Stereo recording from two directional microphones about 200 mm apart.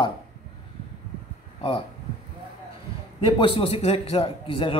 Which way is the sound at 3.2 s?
25° left (ahead or behind).